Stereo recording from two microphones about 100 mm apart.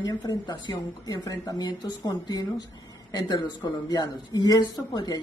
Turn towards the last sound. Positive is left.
turn(degrees=40)  # may be behind; listen again after turning